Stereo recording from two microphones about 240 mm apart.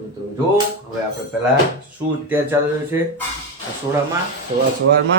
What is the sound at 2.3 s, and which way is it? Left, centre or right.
Speech, centre.